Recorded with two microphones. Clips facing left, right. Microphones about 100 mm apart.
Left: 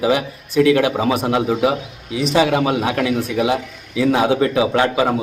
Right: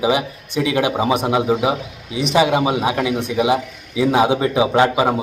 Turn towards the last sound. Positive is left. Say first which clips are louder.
# right 1 dB
turn(degrees=-20)  # may be behind; listen again after turning